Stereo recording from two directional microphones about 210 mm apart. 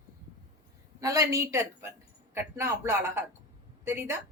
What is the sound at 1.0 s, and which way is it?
A woman's voice, 15° right (ahead or behind).